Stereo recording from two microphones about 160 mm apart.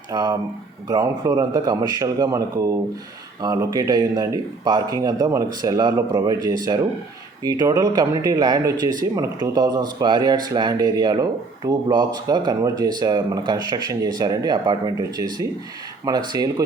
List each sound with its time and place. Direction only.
0.1 s speech: 25° right (ahead or behind)